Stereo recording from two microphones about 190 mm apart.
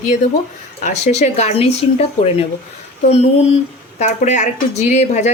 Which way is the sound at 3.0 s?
35° left (ahead or behind).